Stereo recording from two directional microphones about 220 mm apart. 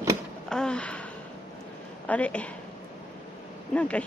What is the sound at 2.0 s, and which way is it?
Speech, 5° left (ahead or behind).